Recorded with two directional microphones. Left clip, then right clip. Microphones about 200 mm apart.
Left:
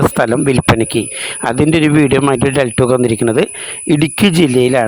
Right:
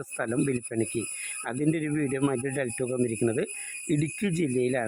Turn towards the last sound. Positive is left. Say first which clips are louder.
# left 16 dB
turn(degrees=50)  # may be behind; listen again after turning